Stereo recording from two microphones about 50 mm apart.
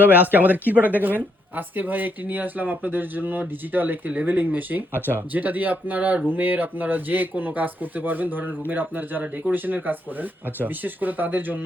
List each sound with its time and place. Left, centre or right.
0.0 s speech: right